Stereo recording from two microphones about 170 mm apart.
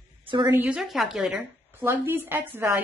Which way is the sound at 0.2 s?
30° right (ahead or behind).